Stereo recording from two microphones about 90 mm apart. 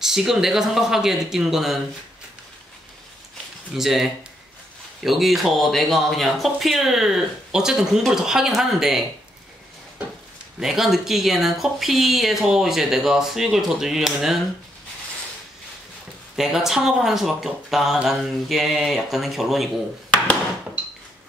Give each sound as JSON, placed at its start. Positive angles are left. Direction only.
{"t": 0.0, "sound": "speech", "side_deg": -5}
{"t": 3.7, "sound": "speech", "side_deg": -5}
{"t": 10.6, "sound": "speech", "side_deg": -5}
{"t": 16.3, "sound": "speech", "side_deg": -5}
{"t": 20.8, "sound": "dishes", "side_deg": -20}